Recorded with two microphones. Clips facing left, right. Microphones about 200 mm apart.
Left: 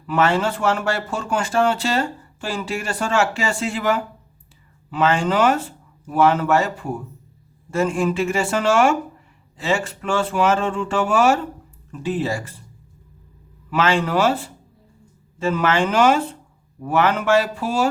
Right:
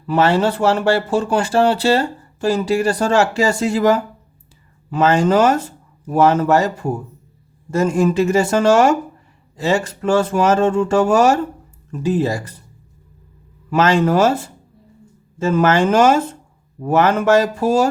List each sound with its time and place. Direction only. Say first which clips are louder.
0.1 s speech: right 4 dB; 35° right (ahead or behind)
13.7 s speech: right 5 dB; 40° right (ahead or behind)